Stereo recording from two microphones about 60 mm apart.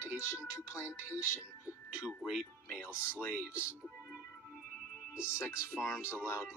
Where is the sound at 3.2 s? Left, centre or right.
Left.